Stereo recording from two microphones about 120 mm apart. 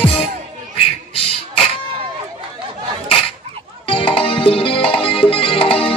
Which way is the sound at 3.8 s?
45° left (ahead or behind).